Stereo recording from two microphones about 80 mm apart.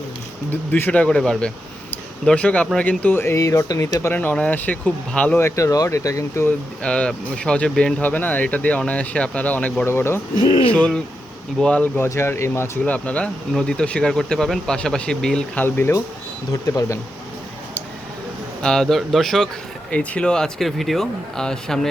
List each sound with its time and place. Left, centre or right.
0.5 s speech: left
3.3 s speech: left
4.0 s speech: left
5.4 s speech: left
6.8 s speech: centre
9.8 s speech: left
10.3 s speech: left
10.7 s speech: centre
11.9 s speech: left
12.8 s speech: centre
15.5 s speech: left
16.5 s speech: left
18.6 s speech: centre
19.9 s speech: centre